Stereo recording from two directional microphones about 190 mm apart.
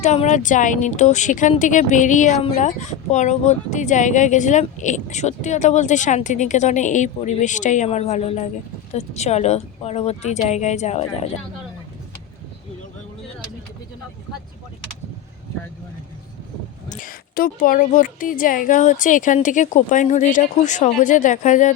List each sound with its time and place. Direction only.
0.0 s a woman's voice: 40° left (ahead or behind)
16.9 s a woman's voice: 45° left (ahead or behind)